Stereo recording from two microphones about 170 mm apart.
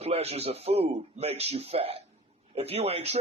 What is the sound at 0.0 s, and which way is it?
A man's voice, 35° right (ahead or behind).